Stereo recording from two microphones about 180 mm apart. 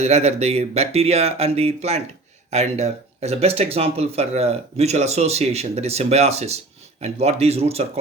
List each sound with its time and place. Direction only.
0.0 s speech: 35° right (ahead or behind)